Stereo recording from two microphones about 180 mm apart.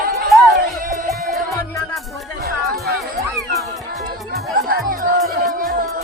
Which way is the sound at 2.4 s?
60° right (ahead or behind).